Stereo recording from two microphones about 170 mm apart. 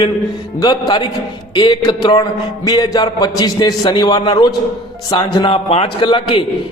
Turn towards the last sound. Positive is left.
turn(degrees=30)  # may be behind; listen again after turning